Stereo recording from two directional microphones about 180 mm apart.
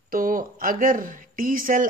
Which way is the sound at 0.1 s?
50° right (ahead or behind).